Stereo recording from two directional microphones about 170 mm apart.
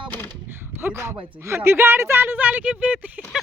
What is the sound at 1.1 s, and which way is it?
Speech, 30° right (ahead or behind).